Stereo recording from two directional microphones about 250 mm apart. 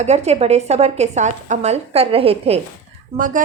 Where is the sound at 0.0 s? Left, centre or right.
Right.